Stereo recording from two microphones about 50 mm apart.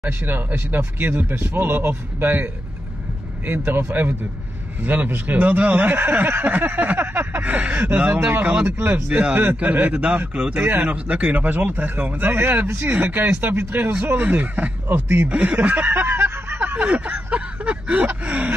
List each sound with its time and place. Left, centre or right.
0.2 s speech: right
7.4 s speech: right
8.6 s speech: right
9.1 s speech: right
14.2 s speech: right
15.9 s a sound: right
16.7 s a sound: right
18.2 s speech: right